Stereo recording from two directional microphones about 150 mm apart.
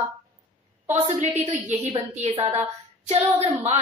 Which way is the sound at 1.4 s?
45° right (ahead or behind).